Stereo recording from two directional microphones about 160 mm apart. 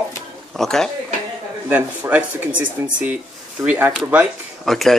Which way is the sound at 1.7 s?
10° right (ahead or behind).